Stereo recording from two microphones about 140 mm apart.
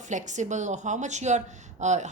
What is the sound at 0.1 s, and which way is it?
A woman's voice, 60° right (ahead or behind).